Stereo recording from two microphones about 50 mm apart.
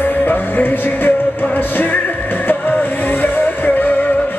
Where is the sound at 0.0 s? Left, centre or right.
Left.